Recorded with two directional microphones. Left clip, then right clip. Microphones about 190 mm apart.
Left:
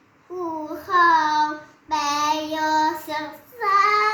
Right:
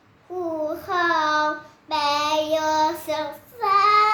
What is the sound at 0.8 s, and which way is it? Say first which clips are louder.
Child singing: left 5 dB; 20° right (ahead or behind).